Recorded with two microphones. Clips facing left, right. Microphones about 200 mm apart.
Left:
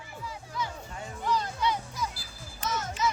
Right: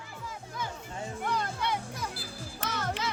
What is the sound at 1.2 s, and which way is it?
Music, 55° right (ahead or behind).